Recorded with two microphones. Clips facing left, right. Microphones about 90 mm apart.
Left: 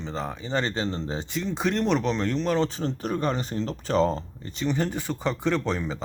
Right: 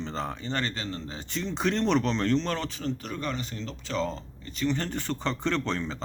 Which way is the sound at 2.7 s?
35° left (ahead or behind).